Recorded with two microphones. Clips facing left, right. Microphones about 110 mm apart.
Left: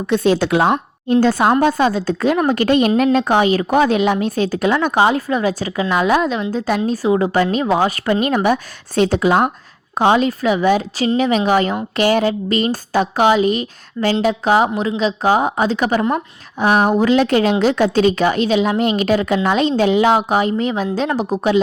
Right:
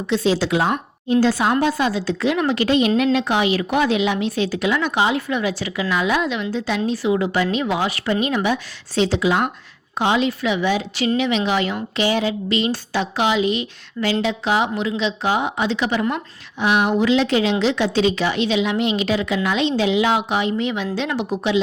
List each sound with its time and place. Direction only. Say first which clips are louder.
0.1 s a woman's voice: left 4 dB; 50° left (ahead or behind)